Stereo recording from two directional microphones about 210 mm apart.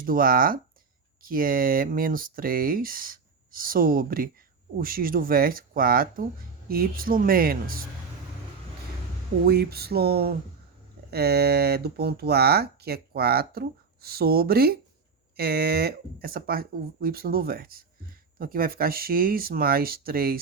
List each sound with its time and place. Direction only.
0.0 s speech: 40° right (ahead or behind)
9.5 s speech: 50° right (ahead or behind)